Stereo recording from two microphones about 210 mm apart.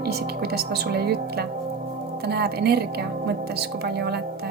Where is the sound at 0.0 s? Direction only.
50° right (ahead or behind).